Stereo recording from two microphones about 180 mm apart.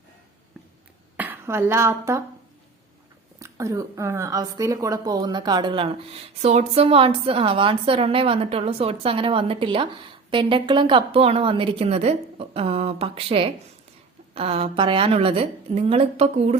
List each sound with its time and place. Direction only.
1.1 s speech: 10° right (ahead or behind)
3.3 s a woman's voice: 15° right (ahead or behind); by 16.6 s 35° right (ahead or behind)